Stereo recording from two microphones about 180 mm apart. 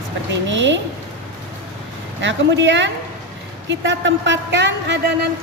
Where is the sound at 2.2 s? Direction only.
80° right.